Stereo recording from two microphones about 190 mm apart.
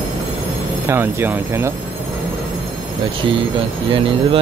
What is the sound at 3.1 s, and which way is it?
Speech, 25° right (ahead or behind).